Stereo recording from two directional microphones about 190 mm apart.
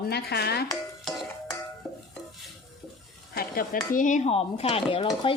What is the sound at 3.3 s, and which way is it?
Speech, 50° left (ahead or behind).